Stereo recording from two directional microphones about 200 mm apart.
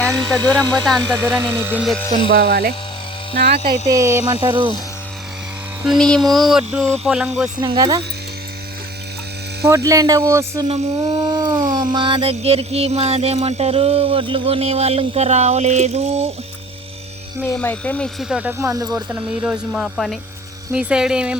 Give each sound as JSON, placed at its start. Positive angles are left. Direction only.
{"t": 0.1, "sound": "speech", "side_deg": -15}
{"t": 2.3, "sound": "speech", "side_deg": -55}
{"t": 3.8, "sound": "speech", "side_deg": -15}
{"t": 5.8, "sound": "a sound", "side_deg": 0}
{"t": 7.6, "sound": "speech", "side_deg": -20}
{"t": 9.6, "sound": "speech", "side_deg": -15}
{"t": 10.7, "sound": "a sound", "side_deg": -25}
{"t": 17.4, "sound": "speech", "side_deg": 10}
{"t": 19.7, "sound": "a sound", "side_deg": 0}